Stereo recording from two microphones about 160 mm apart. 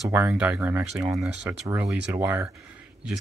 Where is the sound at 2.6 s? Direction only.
5° right (ahead or behind).